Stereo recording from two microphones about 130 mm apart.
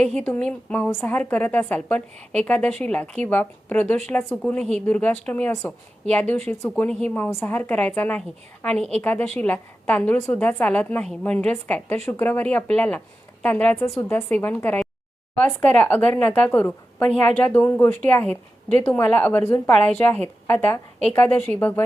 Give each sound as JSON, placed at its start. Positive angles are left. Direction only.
{"t": 0.0, "sound": "a woman's voice", "side_deg": 10}